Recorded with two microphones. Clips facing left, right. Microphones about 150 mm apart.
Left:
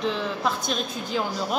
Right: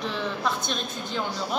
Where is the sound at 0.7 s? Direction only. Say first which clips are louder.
Left 3 dB; 5° left (ahead or behind).